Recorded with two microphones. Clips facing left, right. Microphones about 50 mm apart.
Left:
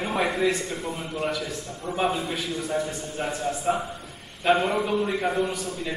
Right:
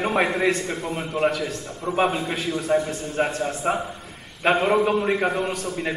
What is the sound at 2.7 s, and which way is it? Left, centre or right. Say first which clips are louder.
A man's voice: right 9 dB; right.